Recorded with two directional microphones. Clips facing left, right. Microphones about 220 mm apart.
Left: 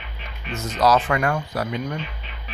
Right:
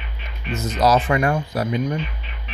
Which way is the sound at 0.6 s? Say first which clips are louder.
Right 1 dB; 20° right (ahead or behind).